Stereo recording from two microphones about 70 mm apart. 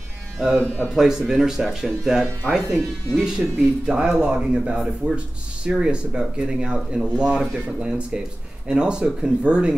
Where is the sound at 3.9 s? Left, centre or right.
Centre.